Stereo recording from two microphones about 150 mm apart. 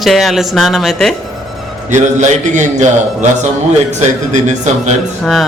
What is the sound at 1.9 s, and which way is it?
A man's voice, 55° right (ahead or behind).